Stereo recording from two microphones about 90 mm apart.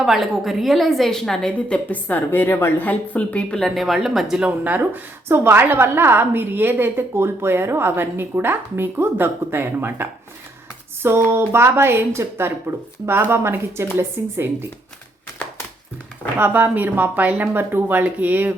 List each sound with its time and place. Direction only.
0.0 s a woman's voice: centre (ahead or behind)
1.5 s a woman's voice: 15° left (ahead or behind); by 14.7 s 25° right (ahead or behind)
16.4 s a woman's voice: 20° right (ahead or behind)